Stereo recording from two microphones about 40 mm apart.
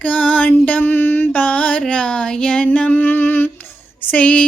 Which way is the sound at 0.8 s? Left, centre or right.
Left.